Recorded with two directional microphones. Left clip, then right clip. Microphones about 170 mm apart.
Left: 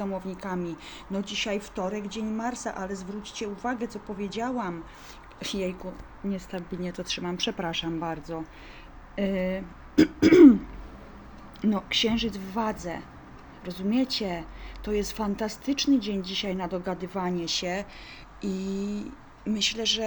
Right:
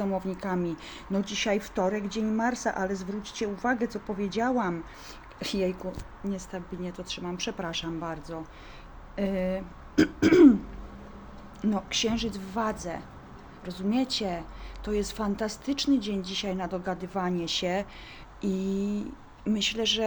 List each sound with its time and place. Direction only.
0.0 s a woman's voice: 20° right (ahead or behind)
5.4 s a sound: 20° right (ahead or behind)
6.3 s speech: 15° left (ahead or behind)
6.9 s speech: 30° right (ahead or behind)
7.4 s a woman's voice: 20° left (ahead or behind)
11.6 s speech: 15° left (ahead or behind)
17.4 s a sound: 10° right (ahead or behind)